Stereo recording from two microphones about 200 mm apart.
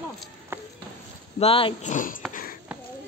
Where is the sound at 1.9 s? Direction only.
45° left (ahead or behind).